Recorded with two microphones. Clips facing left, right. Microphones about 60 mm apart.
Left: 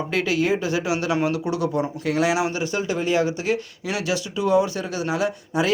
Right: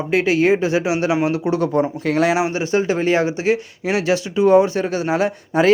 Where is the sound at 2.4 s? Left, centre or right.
Right.